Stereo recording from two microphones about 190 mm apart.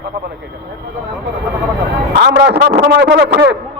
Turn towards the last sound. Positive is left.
turn(degrees=-60)  # may be behind; listen again after turning